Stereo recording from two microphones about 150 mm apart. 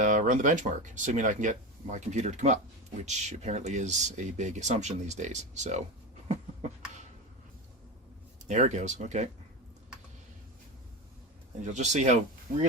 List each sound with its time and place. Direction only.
0.0 s speech: 55° right (ahead or behind)
6.2 s a sound: 50° right (ahead or behind)
8.4 s speech: 50° right (ahead or behind)
11.6 s speech: 50° right (ahead or behind)